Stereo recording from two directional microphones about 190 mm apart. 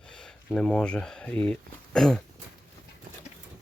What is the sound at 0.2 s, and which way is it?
Speech, 5° left (ahead or behind).